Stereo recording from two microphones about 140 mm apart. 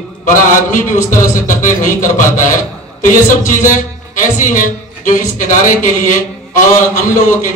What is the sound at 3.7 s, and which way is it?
A man's voice, 65° left (ahead or behind).